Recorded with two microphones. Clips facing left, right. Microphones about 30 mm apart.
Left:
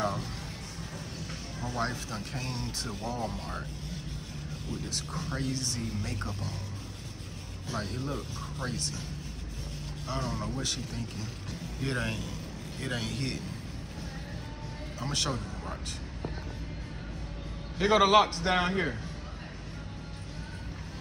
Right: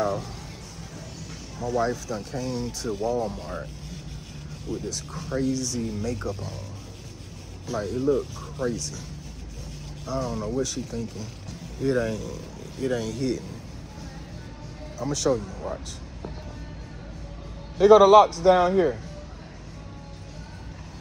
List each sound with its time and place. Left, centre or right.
0.0 s a sound: left
1.2 s a man's voice: left
4.6 s speech: left
7.6 s speech: left
10.0 s speech: left
15.0 s speech: left
17.7 s a man's voice: left